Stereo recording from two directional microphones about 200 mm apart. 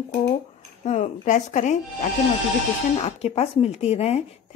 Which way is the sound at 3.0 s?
30° left (ahead or behind).